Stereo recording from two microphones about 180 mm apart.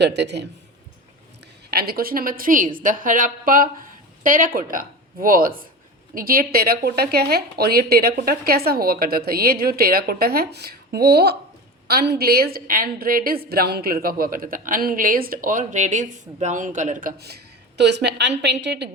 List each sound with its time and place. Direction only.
0.0 s a man's voice: 70° right (ahead or behind)
1.7 s a woman's voice: 60° right (ahead or behind); by 18.9 s 75° right (ahead or behind)